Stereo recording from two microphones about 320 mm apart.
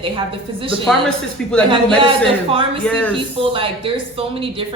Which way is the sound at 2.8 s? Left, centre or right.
Centre.